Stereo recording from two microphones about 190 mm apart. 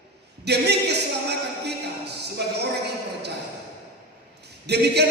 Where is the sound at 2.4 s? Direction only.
60° right (ahead or behind).